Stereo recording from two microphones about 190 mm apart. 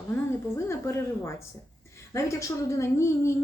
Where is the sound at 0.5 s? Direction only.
15° left (ahead or behind).